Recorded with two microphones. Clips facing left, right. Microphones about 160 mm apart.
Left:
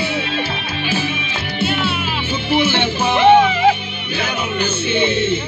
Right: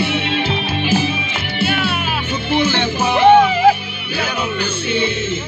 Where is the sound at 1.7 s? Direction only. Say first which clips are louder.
Right 1 dB; 55° right (ahead or behind).